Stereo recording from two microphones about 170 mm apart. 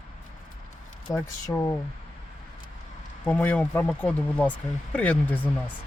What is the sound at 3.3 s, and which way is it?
Speech, 10° left (ahead or behind).